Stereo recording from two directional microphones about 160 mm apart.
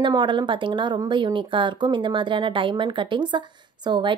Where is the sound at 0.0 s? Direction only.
30° right (ahead or behind).